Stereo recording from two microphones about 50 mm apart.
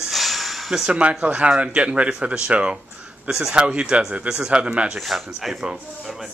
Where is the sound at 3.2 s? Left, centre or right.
Centre.